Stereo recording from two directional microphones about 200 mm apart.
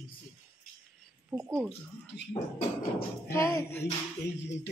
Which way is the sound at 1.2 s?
10° right (ahead or behind).